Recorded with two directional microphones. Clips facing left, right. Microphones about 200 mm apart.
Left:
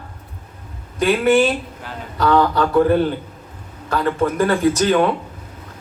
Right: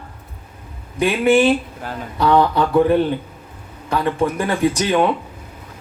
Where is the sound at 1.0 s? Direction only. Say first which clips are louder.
Even; 15° right (ahead or behind).